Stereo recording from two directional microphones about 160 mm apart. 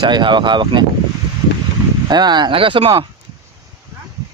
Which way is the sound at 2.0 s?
25° right (ahead or behind).